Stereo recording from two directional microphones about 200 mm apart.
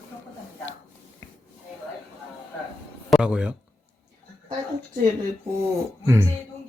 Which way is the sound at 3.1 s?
5° right (ahead or behind).